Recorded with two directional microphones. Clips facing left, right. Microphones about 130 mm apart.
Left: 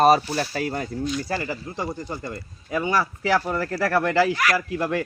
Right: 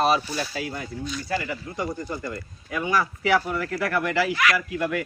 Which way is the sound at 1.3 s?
30° left (ahead or behind).